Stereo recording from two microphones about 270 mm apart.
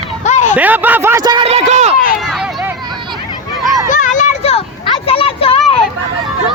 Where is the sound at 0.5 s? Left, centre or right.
Centre; by 1.9 s right.